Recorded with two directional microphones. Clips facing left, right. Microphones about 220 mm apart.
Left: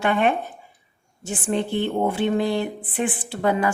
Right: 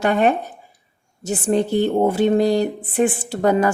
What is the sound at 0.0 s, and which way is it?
A woman's voice, 40° right (ahead or behind).